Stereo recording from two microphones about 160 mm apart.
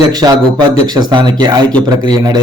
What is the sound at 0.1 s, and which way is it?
Speech, 25° right (ahead or behind).